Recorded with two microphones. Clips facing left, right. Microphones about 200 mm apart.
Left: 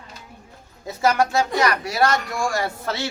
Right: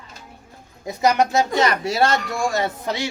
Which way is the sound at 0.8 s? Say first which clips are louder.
Right 1 dB; 15° right (ahead or behind).